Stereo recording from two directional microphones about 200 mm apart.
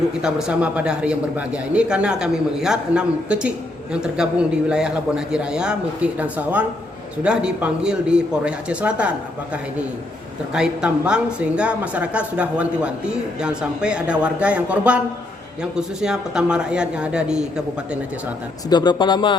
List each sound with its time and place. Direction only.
0.2 s a man's voice: 5° right (ahead or behind)
10.5 s a man's voice: 5° right (ahead or behind)
18.7 s speech: 20° left (ahead or behind)